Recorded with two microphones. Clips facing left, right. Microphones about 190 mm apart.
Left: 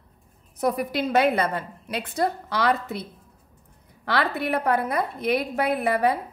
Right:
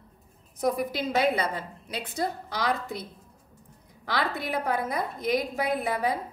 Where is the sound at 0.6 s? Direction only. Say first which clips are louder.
Left 3 dB; 65° left (ahead or behind).